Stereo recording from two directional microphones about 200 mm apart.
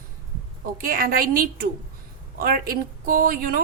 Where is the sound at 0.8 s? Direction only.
45° right (ahead or behind).